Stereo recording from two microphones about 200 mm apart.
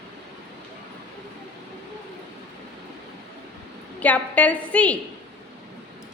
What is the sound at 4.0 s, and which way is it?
A woman's voice, 5° left (ahead or behind).